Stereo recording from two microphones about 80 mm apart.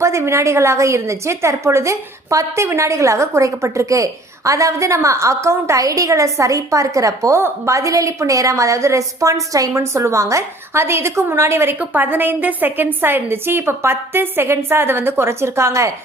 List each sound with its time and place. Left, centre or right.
0.0 s a woman's voice: right